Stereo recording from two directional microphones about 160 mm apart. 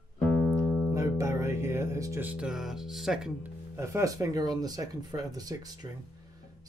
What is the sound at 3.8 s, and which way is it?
Speech, 20° right (ahead or behind).